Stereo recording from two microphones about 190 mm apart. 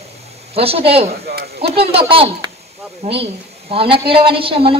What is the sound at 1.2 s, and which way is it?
Speech, 55° right (ahead or behind).